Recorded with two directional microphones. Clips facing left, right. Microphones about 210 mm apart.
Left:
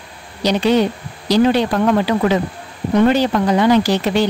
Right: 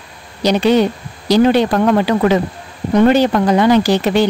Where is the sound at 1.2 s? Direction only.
50° right (ahead or behind).